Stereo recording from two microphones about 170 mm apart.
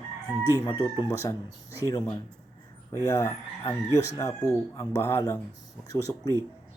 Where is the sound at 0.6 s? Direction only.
20° left (ahead or behind).